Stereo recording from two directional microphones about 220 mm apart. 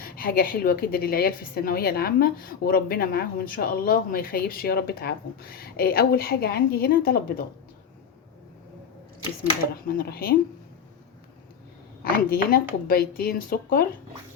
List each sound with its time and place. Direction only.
0.0 s a woman's voice: 40° left (ahead or behind)
9.8 s a woman's voice: 40° left (ahead or behind)
12.1 s a woman's voice: 40° left (ahead or behind)